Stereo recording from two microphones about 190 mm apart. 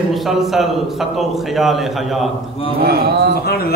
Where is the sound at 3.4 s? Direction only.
55° left (ahead or behind).